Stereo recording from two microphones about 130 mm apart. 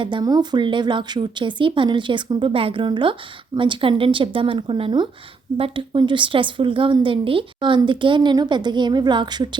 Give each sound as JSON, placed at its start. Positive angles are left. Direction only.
{"t": 0.0, "sound": "speech", "side_deg": -35}